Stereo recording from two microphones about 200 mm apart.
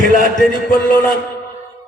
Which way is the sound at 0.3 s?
40° left (ahead or behind).